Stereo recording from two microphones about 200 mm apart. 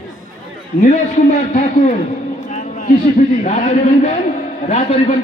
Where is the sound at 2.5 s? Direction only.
40° left (ahead or behind).